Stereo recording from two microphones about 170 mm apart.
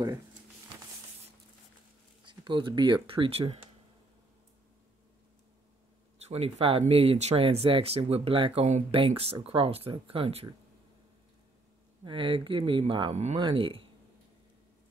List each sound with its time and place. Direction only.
2.2 s speech: 30° right (ahead or behind)
6.1 s speech: 40° right (ahead or behind)
12.0 s speech: 30° right (ahead or behind)
13.1 s speech: 40° right (ahead or behind)
13.4 s speech: 30° right (ahead or behind)